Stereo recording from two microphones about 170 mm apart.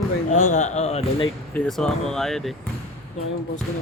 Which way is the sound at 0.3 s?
45° left (ahead or behind).